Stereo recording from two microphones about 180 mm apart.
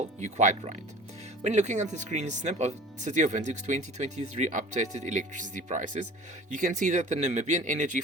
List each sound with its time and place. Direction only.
0.0 s speech: 40° right (ahead or behind)